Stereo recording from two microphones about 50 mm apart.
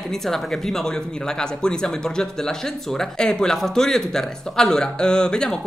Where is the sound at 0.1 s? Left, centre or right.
Centre.